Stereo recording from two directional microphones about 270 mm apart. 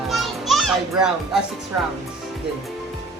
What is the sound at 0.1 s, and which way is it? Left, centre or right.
Children playing, centre.